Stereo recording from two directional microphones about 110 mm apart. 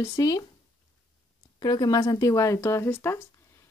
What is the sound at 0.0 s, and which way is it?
Speech, 30° left (ahead or behind).